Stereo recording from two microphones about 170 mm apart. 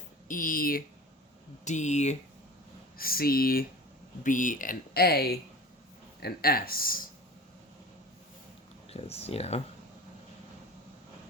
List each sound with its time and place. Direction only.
0.3 s speech: 55° left (ahead or behind)
1.6 s speech: 45° left (ahead or behind)
3.0 s speech: 60° left (ahead or behind)
8.9 s speech: 35° left (ahead or behind)